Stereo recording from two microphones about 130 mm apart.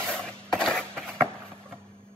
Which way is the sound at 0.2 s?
5° left (ahead or behind).